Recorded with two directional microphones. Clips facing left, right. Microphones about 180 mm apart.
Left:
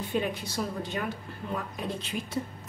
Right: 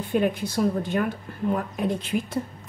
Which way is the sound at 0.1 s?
55° right (ahead or behind).